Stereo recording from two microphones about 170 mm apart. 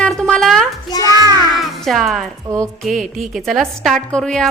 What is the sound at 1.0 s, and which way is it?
Speech, 20° right (ahead or behind).